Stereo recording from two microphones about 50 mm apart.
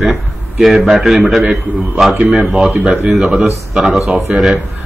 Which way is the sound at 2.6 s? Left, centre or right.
Centre.